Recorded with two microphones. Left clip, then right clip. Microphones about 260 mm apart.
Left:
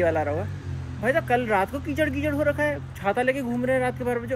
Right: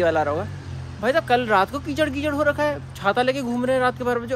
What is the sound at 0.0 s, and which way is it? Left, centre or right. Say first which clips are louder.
Speech: right 3 dB; right.